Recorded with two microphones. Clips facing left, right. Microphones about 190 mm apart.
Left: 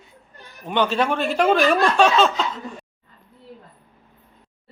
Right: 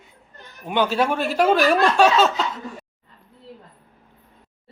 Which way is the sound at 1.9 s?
5° right (ahead or behind).